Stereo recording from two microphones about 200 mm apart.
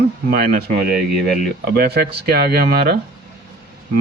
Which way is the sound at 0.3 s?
50° right (ahead or behind).